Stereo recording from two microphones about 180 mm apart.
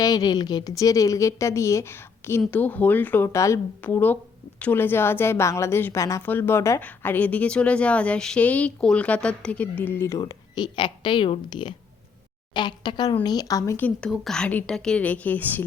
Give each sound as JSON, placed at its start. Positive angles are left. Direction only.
{"t": 0.0, "sound": "a woman's voice", "side_deg": 20}